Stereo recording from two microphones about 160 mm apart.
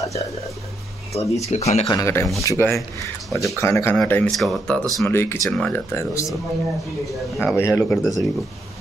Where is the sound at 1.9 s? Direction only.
20° left (ahead or behind); by 4.8 s 5° left (ahead or behind).